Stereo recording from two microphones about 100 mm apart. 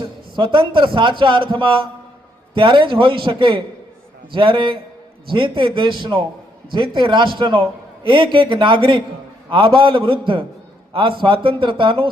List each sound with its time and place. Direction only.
0.0 s a man's voice: 55° right (ahead or behind)